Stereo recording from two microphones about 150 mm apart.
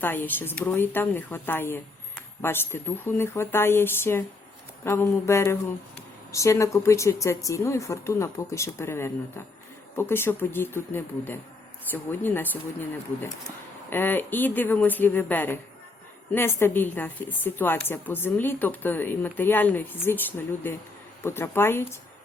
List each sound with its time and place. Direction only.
0.0 s a woman's voice: 15° left (ahead or behind)
13.9 s a woman's voice: 15° left (ahead or behind)